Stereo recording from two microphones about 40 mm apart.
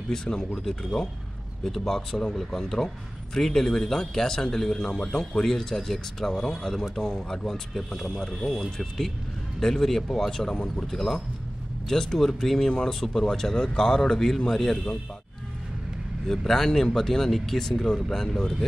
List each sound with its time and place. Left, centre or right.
0.1 s speech: centre
0.7 s speech: centre
8.1 s speech: centre
10.5 s speech: left
10.9 s speech: centre
16.3 s speech: centre